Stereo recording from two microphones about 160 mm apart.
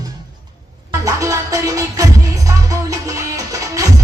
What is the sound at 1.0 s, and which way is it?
Music, 20° right (ahead or behind).